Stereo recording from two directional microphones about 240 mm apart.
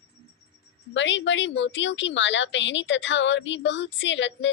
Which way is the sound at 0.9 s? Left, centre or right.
Left.